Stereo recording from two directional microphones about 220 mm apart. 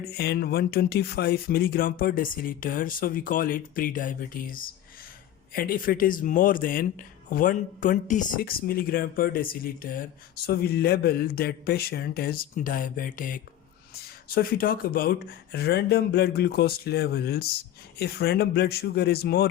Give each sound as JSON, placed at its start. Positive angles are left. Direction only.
{"t": 0.0, "sound": "speech", "side_deg": 45}